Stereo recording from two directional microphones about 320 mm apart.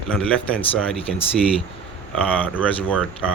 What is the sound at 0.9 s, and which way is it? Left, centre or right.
Speech, centre.